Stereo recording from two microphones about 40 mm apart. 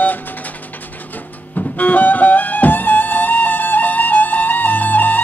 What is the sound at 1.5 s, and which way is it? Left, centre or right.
Music, left.